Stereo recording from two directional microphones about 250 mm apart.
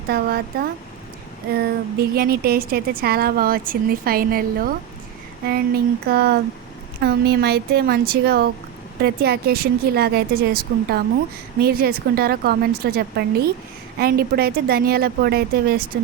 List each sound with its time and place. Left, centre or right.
0.1 s speech: right